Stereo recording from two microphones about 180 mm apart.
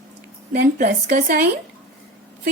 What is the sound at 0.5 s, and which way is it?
Speech, 55° right (ahead or behind).